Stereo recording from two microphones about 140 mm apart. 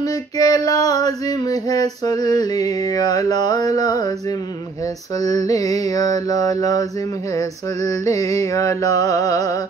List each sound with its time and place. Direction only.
0.0 s female singing: 25° left (ahead or behind)
5.2 s female singing: 25° left (ahead or behind)